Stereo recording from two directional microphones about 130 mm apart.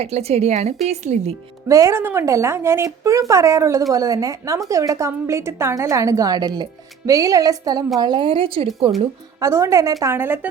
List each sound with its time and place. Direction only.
0.0 s speech: 55° right (ahead or behind)
1.6 s a woman's voice: 25° right (ahead or behind); by 8.9 s 45° right (ahead or behind)
9.4 s a woman's voice: 20° right (ahead or behind)